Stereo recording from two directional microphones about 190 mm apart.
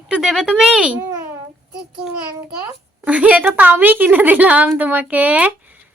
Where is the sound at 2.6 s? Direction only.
5° right (ahead or behind).